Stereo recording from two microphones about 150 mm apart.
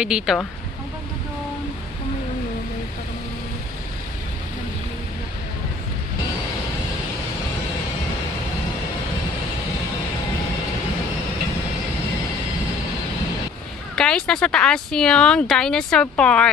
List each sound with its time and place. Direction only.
0.0 s speech: 5° right (ahead or behind)
13.9 s speech: 5° left (ahead or behind)